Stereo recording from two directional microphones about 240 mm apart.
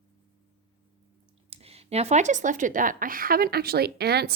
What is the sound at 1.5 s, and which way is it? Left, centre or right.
Speech, right.